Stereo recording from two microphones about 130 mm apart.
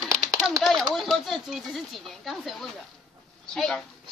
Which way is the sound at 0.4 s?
Centre (ahead or behind).